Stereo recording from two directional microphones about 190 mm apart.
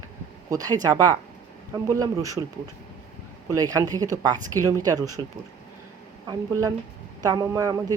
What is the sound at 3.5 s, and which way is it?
Speech, 20° right (ahead or behind).